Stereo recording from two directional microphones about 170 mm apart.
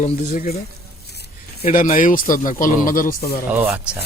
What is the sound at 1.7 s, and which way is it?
Speech, 50° left (ahead or behind).